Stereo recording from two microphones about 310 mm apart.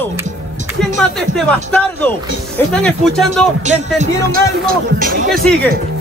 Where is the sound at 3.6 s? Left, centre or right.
Right.